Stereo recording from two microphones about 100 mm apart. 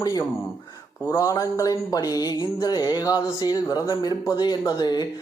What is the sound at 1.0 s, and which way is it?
Mantra, 30° left (ahead or behind).